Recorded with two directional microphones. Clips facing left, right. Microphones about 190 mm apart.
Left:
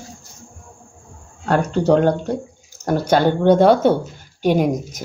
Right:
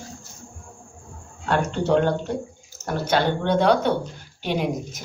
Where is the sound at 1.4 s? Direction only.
40° left (ahead or behind).